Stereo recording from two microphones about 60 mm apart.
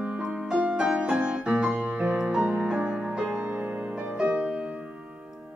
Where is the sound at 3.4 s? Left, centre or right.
Right.